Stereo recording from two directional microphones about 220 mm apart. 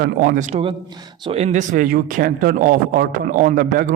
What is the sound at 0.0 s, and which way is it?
Speech, 40° right (ahead or behind).